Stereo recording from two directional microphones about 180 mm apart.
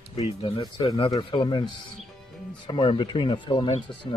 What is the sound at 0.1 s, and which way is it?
A man's voice, 35° left (ahead or behind).